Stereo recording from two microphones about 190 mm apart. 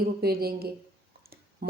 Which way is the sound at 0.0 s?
55° right (ahead or behind).